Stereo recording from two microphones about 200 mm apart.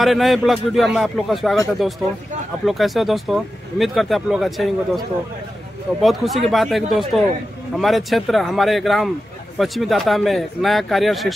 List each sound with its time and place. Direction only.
0.0 s speech: centre (ahead or behind)
2.6 s speech: centre (ahead or behind)
6.0 s speech: centre (ahead or behind)